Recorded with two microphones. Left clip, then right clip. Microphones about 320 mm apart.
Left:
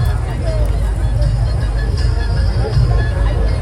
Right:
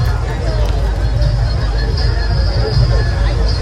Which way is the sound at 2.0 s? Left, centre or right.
Centre.